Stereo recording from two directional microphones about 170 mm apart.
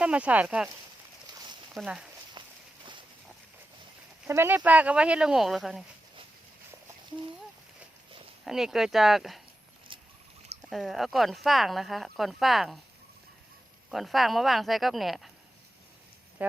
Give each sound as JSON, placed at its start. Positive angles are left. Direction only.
{"t": 0.0, "sound": "speech", "side_deg": -5}
{"t": 1.7, "sound": "speech", "side_deg": -5}
{"t": 2.4, "sound": "walk", "side_deg": -25}
{"t": 4.3, "sound": "speech", "side_deg": -15}
{"t": 8.4, "sound": "speech", "side_deg": 0}
{"t": 10.7, "sound": "speech", "side_deg": 0}
{"t": 13.9, "sound": "speech", "side_deg": 0}
{"t": 16.4, "sound": "speech", "side_deg": -10}